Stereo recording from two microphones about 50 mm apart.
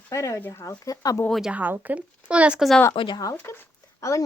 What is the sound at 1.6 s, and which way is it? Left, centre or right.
Speech, right.